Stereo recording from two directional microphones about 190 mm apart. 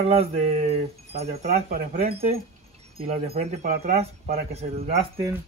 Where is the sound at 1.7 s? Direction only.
50° right (ahead or behind).